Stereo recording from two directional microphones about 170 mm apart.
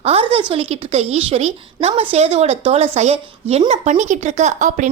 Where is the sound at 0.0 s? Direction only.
35° right (ahead or behind).